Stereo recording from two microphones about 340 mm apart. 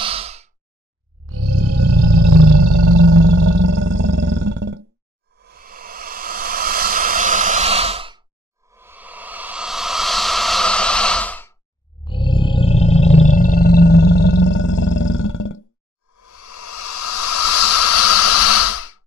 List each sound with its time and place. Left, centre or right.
0.0 s sigh: centre
1.2 s a sound: right
3.8 s roar: right
5.4 s a sound: right; by 11.5 s centre
12.0 s roar: centre; by 15.0 s left
15.0 s roar: left
16.2 s hiss: left